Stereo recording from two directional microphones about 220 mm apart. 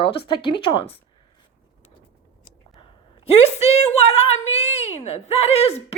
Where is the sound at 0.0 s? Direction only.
25° left (ahead or behind).